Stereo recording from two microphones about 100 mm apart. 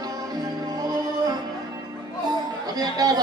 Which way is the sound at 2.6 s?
40° right (ahead or behind).